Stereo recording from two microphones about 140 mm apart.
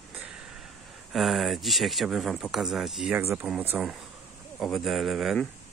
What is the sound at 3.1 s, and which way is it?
Speech, 15° right (ahead or behind).